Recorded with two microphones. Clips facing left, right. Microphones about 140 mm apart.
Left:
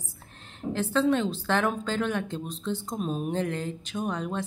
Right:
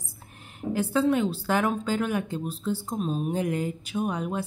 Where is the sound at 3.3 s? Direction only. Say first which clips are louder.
Right 2 dB; 10° right (ahead or behind).